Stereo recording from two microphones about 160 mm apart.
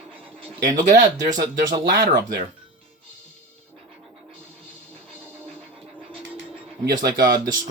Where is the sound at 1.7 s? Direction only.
25° right (ahead or behind).